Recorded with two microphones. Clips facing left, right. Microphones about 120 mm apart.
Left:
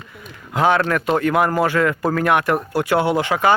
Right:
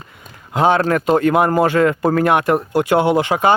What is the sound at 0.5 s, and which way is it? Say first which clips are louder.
Speech: right 2 dB; 30° right (ahead or behind).